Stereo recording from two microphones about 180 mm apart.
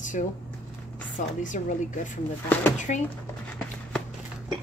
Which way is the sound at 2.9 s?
40° left (ahead or behind).